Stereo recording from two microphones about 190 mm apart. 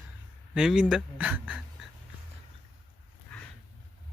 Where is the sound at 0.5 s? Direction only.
5° right (ahead or behind).